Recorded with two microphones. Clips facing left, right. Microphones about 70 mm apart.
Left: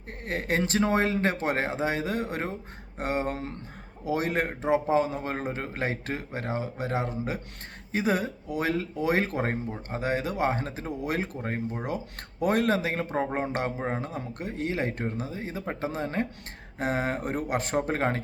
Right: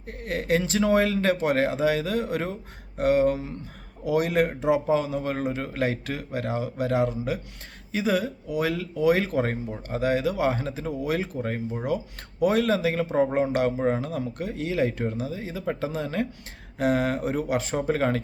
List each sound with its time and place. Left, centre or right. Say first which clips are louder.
0.1 s speech: right 4 dB; left
4.0 s speech: right 5 dB; left